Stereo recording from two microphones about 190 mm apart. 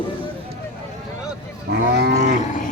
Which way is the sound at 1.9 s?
55° right (ahead or behind).